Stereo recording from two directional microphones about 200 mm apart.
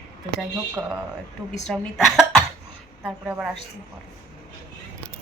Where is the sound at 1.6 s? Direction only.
Centre (ahead or behind).